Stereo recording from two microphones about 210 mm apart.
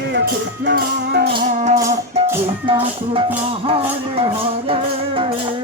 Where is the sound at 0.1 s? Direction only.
55° right (ahead or behind).